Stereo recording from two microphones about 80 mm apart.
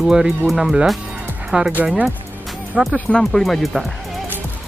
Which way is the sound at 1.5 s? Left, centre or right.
Centre.